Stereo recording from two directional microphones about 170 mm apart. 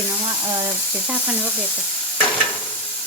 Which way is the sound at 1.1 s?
10° right (ahead or behind).